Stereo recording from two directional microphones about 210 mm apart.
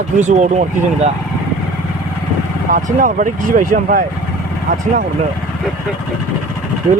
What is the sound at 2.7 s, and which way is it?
Speech, 40° right (ahead or behind).